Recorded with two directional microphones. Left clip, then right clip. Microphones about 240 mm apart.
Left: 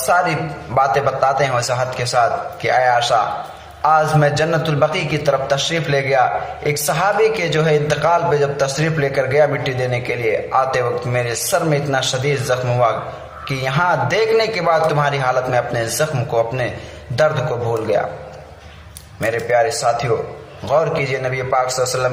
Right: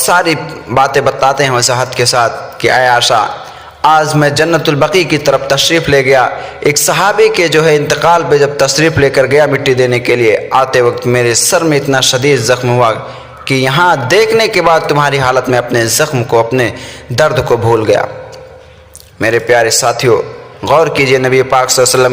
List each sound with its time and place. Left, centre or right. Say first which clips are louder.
0.1 s a man's voice: right 5 dB; right
19.2 s a man's voice: right 7 dB; right